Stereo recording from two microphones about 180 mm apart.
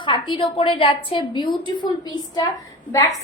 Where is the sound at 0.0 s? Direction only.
25° left (ahead or behind).